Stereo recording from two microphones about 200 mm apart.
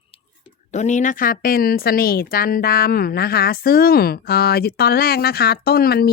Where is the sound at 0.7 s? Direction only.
35° left (ahead or behind).